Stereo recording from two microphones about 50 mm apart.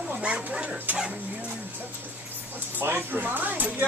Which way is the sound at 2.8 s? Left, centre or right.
Right.